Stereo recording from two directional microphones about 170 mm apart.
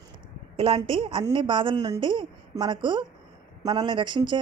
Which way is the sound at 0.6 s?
30° right (ahead or behind).